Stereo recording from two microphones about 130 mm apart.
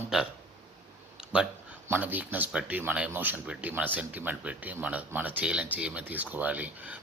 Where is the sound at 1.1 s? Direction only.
10° right (ahead or behind).